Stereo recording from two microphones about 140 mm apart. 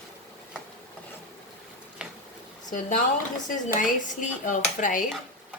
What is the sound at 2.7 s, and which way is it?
A woman's voice, 65° left (ahead or behind).